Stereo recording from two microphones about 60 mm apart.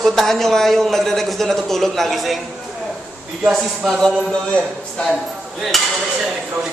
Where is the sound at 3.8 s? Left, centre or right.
Centre.